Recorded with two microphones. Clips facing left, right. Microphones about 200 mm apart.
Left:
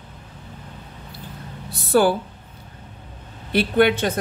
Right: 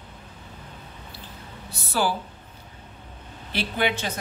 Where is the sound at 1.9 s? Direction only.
55° left (ahead or behind).